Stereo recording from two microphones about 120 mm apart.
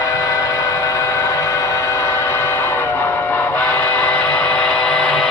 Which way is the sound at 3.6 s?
15° left (ahead or behind).